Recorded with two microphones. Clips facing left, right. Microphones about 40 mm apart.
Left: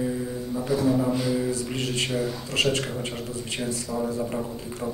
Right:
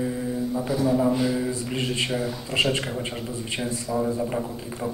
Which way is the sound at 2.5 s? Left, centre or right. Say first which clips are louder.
Right 1 dB; right.